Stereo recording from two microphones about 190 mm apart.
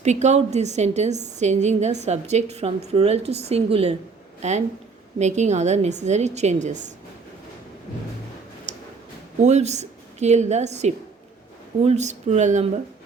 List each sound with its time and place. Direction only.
0.0 s a woman's voice: 35° right (ahead or behind)
9.4 s a woman's voice: 35° right (ahead or behind)